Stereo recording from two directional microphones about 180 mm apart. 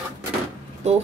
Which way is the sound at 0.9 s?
40° right (ahead or behind).